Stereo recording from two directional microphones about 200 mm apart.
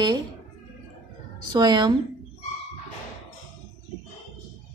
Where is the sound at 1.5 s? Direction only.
20° right (ahead or behind).